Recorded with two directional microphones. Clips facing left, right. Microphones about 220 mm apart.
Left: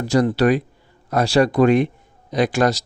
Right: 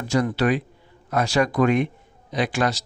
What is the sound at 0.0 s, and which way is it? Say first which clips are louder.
Speech: left 5 dB; 35° left (ahead or behind).